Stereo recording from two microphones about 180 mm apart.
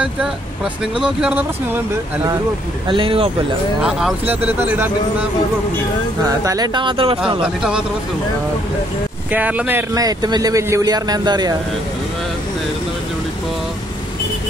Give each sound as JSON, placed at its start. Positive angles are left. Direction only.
{"t": 0.9, "sound": "speech", "side_deg": -5}
{"t": 2.9, "sound": "speech", "side_deg": -30}
{"t": 3.8, "sound": "speech", "side_deg": -5}
{"t": 6.2, "sound": "speech", "side_deg": -20}
{"t": 7.4, "sound": "speech", "side_deg": -5}
{"t": 9.3, "sound": "speech", "side_deg": -10}